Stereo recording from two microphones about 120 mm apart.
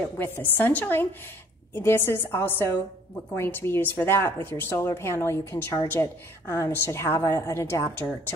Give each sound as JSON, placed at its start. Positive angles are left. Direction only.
{"t": 0.2, "sound": "a woman's voice", "side_deg": 15}